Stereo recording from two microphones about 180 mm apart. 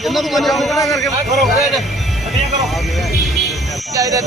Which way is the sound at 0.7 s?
20° left (ahead or behind).